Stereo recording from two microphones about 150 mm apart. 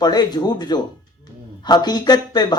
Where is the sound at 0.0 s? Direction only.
25° left (ahead or behind).